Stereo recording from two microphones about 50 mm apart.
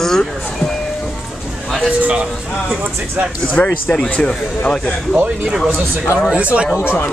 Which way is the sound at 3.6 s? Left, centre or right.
Left.